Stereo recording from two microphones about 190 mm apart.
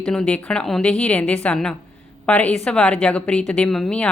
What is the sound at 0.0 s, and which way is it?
A woman's voice, 5° left (ahead or behind).